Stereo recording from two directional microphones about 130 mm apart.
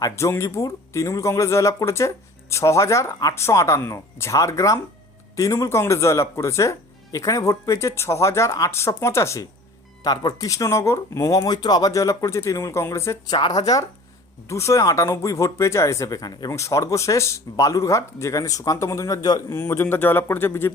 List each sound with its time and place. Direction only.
0.0 s speech: 20° left (ahead or behind)
19.5 s a man's voice: 20° left (ahead or behind)